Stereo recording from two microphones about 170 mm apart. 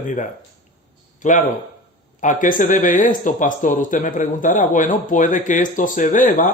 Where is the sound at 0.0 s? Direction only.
50° left (ahead or behind).